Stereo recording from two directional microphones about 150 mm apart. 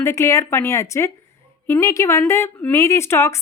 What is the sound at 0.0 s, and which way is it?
A woman's voice, 20° left (ahead or behind).